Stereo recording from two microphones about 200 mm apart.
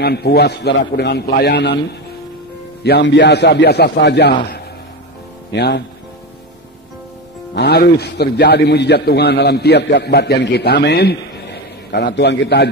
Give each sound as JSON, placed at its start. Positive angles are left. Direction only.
{"t": 0.0, "sound": "a man's voice", "side_deg": 55}
{"t": 5.5, "sound": "a man's voice", "side_deg": 55}
{"t": 7.5, "sound": "a man's voice", "side_deg": 55}